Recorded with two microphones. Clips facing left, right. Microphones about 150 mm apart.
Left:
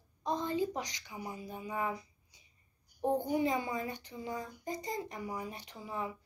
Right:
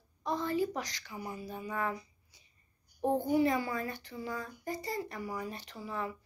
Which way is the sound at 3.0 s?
20° left (ahead or behind).